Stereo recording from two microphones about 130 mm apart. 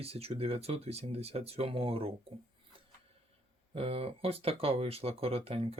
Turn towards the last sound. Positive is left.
turn(degrees=-50)  # may be behind; listen again after turning